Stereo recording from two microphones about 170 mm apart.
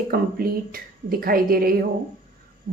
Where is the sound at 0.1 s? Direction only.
60° right (ahead or behind).